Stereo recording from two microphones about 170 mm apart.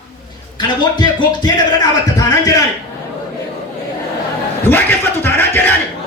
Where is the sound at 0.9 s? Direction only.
25° left (ahead or behind).